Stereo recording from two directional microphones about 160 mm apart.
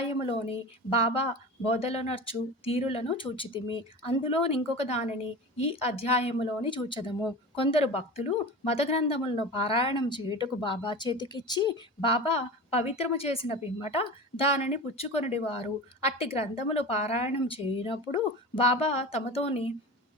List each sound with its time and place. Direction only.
0.2 s speech: 35° left (ahead or behind)